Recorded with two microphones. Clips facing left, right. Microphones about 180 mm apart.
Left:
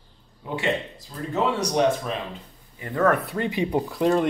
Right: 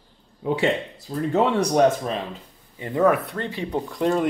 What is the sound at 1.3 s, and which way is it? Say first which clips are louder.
Speech: right 4 dB; 55° right (ahead or behind).